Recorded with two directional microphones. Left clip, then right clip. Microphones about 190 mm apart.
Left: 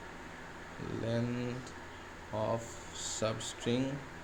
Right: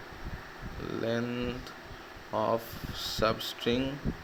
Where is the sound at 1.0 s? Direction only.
20° right (ahead or behind).